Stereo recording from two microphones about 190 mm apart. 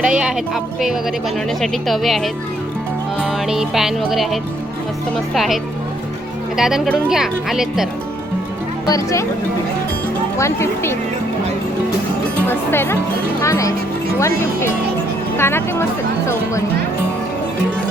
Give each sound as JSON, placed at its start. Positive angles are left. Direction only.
{"t": 0.0, "sound": "speech", "side_deg": -5}
{"t": 6.6, "sound": "speech", "side_deg": 0}
{"t": 8.9, "sound": "speech", "side_deg": 15}
{"t": 10.3, "sound": "speech", "side_deg": 15}
{"t": 12.5, "sound": "speech", "side_deg": 10}